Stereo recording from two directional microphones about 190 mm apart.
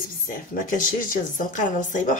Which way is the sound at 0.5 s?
45° left (ahead or behind).